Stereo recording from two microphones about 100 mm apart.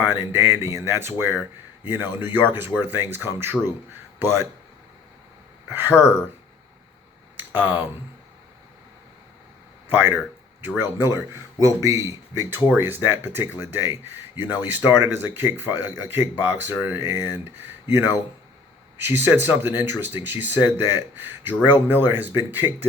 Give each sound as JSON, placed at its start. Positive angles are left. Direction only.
{"t": 0.0, "sound": "speech", "side_deg": -20}
{"t": 5.6, "sound": "speech", "side_deg": -20}
{"t": 7.3, "sound": "a sound", "side_deg": -20}
{"t": 9.9, "sound": "speech", "side_deg": -20}